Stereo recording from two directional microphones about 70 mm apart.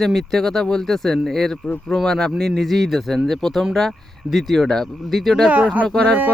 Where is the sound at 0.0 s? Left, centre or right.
Centre.